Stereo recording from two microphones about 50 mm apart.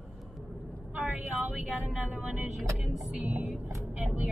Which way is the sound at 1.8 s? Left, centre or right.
Right.